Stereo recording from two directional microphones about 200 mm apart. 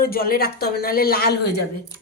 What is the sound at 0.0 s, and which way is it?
Speech, 50° left (ahead or behind).